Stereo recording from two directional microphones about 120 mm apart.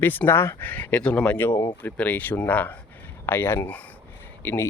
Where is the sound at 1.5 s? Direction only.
25° left (ahead or behind).